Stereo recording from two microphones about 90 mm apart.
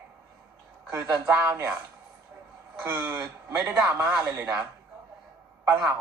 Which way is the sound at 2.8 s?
30° right (ahead or behind).